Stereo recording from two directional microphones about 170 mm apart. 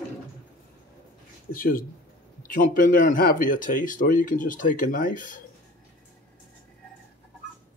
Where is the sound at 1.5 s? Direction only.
55° left (ahead or behind).